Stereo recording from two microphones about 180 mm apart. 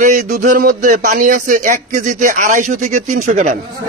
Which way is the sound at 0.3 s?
45° right (ahead or behind).